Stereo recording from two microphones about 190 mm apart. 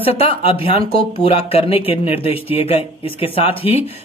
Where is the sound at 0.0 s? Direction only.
30° left (ahead or behind).